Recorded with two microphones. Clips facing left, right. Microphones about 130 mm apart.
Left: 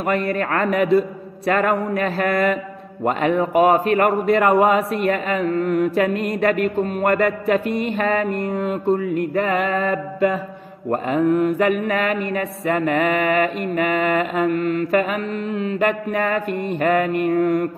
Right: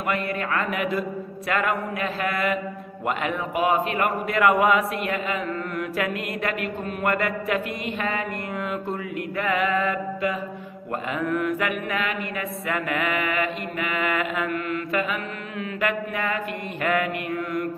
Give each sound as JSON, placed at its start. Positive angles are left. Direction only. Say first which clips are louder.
{"t": 0.0, "sound": "a man's voice", "louder": "left 6 dB", "side_deg": 40}
{"t": 15.5, "sound": "a man's voice", "louder": "left 5 dB", "side_deg": 30}